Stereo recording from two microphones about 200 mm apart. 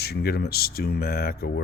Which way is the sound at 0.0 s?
55° left (ahead or behind).